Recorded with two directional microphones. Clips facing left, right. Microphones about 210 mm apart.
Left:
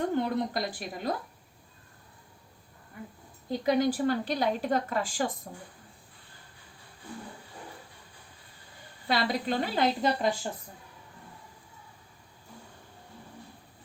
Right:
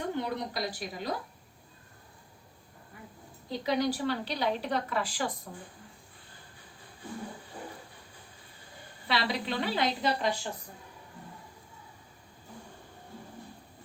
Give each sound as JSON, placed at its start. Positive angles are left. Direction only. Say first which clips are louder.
{"t": 0.2, "sound": "a woman's voice", "louder": "left 4 dB", "side_deg": 50}
{"t": 3.5, "sound": "a woman's voice", "louder": "left 3 dB", "side_deg": 50}
{"t": 9.0, "sound": "a woman's voice", "louder": "left 3 dB", "side_deg": 45}